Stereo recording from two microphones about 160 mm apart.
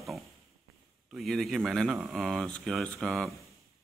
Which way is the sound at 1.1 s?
Centre (ahead or behind).